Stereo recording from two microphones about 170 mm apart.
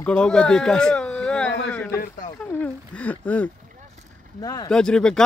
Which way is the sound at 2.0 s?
50° left (ahead or behind).